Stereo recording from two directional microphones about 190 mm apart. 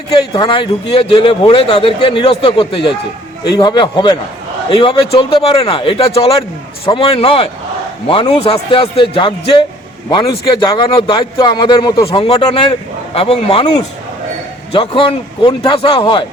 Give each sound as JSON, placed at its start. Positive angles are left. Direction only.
{"t": 0.3, "sound": "a man's voice", "side_deg": 25}